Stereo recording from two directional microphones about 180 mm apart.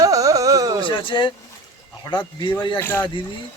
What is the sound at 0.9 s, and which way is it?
Speech, 30° left (ahead or behind).